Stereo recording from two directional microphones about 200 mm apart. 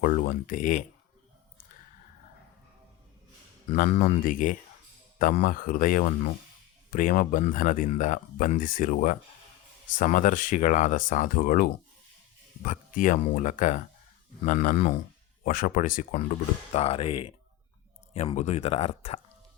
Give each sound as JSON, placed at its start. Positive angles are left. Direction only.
{"t": 0.0, "sound": "speech", "side_deg": 45}
{"t": 3.7, "sound": "speech", "side_deg": 40}
{"t": 16.7, "sound": "speech", "side_deg": 30}